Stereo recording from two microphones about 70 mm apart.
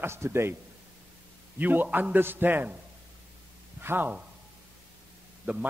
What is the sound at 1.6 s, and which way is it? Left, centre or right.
A man's voice, right.